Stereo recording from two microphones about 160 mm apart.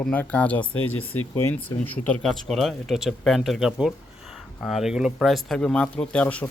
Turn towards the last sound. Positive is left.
turn(degrees=10)  # may be behind; listen again after turning